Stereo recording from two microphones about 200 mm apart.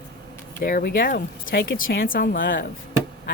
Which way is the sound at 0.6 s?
45° left (ahead or behind).